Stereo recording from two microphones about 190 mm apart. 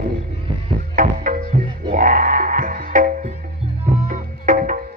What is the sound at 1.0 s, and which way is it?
Music, 45° right (ahead or behind).